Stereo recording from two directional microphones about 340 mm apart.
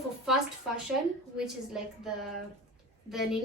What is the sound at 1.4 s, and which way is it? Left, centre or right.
A woman's voice, centre.